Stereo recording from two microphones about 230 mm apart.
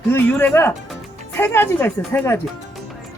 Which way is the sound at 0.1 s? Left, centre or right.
Centre.